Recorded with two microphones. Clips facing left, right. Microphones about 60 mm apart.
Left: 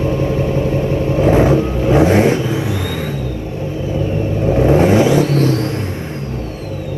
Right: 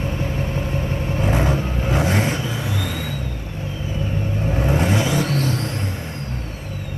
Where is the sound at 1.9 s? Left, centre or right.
Left.